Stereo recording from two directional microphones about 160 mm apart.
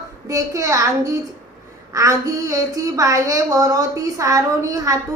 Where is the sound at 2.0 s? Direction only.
20° right (ahead or behind).